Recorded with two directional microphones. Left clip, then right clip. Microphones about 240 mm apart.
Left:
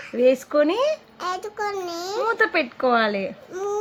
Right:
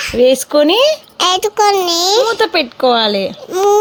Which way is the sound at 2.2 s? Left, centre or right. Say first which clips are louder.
Right 7 dB; right.